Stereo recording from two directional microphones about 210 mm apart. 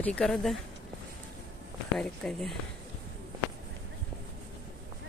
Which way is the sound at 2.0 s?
Centre (ahead or behind).